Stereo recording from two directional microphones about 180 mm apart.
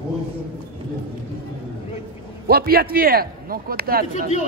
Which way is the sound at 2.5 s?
55° right (ahead or behind).